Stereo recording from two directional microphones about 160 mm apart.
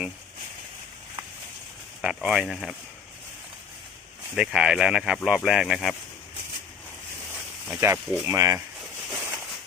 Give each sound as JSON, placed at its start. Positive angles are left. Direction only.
{"t": 2.0, "sound": "speech", "side_deg": -5}
{"t": 4.4, "sound": "speech", "side_deg": -5}
{"t": 7.7, "sound": "speech", "side_deg": -10}
{"t": 9.0, "sound": "a sound", "side_deg": -5}